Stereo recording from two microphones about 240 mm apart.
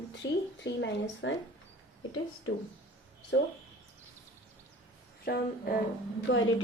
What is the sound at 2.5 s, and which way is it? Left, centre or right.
Speech, left.